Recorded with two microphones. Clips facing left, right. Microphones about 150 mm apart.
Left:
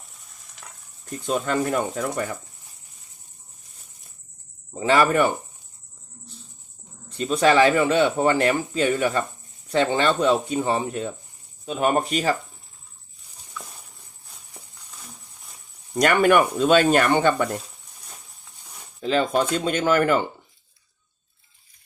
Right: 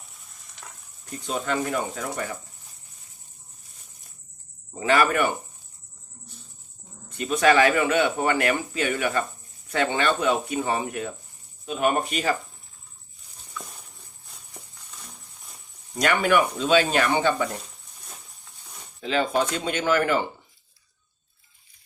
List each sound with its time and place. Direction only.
1.2 s speech: 45° left (ahead or behind)
4.8 s speech: 30° left (ahead or behind)
7.1 s speech: 30° left (ahead or behind)
16.0 s speech: 50° left (ahead or behind)
19.6 s speech: 45° left (ahead or behind)